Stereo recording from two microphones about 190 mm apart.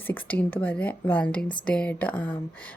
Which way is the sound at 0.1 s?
10° left (ahead or behind).